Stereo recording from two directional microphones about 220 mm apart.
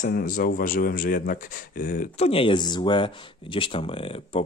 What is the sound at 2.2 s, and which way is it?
Speech, 25° left (ahead or behind).